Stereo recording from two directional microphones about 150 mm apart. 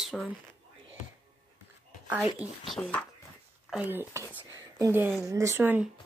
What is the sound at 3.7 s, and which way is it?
Speech, 10° right (ahead or behind).